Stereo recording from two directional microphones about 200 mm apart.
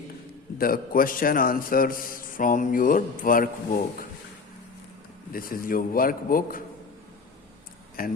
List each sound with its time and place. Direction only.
0.6 s a man's voice: 45° left (ahead or behind)
5.3 s a man's voice: 45° left (ahead or behind)
8.0 s a man's voice: 45° left (ahead or behind)